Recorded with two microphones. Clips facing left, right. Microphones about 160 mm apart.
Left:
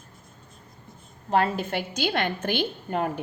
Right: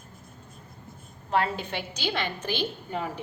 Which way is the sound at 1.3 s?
45° left (ahead or behind).